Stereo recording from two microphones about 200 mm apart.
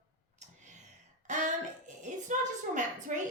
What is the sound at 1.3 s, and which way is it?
A woman's voice, 40° right (ahead or behind).